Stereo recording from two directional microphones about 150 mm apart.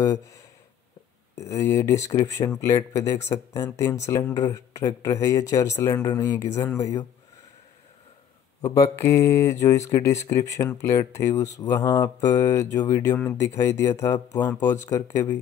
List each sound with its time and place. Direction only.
0.0 s speech: 20° left (ahead or behind)
1.4 s speech: 20° left (ahead or behind)
8.5 s speech: 20° left (ahead or behind)
14.4 s speech: 15° left (ahead or behind)